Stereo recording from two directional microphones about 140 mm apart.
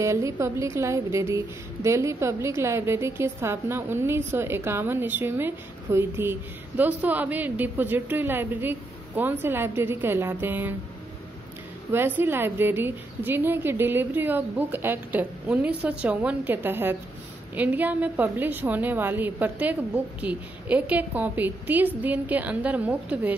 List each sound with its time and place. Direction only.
0.0 s a woman's voice: 20° right (ahead or behind)
11.9 s a woman's voice: 15° right (ahead or behind)